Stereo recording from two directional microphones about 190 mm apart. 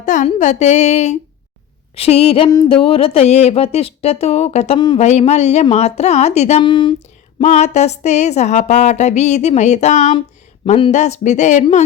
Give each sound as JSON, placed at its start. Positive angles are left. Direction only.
{"t": 0.0, "sound": "a woman's voice", "side_deg": 40}
{"t": 2.0, "sound": "music", "side_deg": 30}
{"t": 2.8, "sound": "a woman's voice", "side_deg": 30}
{"t": 7.3, "sound": "a woman's voice", "side_deg": 35}